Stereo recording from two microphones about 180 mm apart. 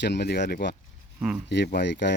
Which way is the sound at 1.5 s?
65° left (ahead or behind).